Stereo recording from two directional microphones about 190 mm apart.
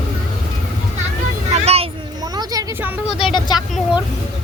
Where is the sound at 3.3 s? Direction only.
25° left (ahead or behind).